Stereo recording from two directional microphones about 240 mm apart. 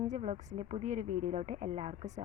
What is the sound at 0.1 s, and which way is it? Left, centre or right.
A woman's voice, right.